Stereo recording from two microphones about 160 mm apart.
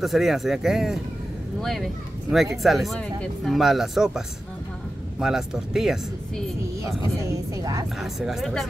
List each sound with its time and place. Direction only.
0.0 s speech: centre (ahead or behind)
5.2 s speech: 5° right (ahead or behind)
7.2 s a woman's voice: 20° right (ahead or behind)
8.0 s speech: centre (ahead or behind)